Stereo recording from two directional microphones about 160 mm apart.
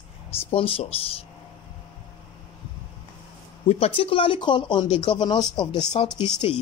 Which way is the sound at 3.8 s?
35° left (ahead or behind).